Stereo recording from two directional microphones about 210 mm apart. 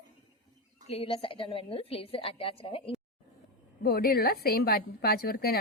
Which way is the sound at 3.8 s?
45° left (ahead or behind).